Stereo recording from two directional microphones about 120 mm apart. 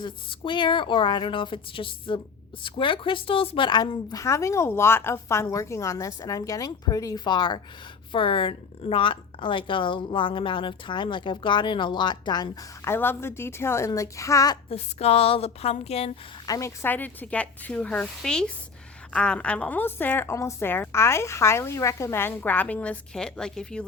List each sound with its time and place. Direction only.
0.0 s a woman's voice: 40° left (ahead or behind)
12.8 s speech: 20° left (ahead or behind)
14.7 s a woman's voice: 60° left (ahead or behind)
16.5 s a woman's voice: 25° left (ahead or behind); by 23.8 s 5° left (ahead or behind)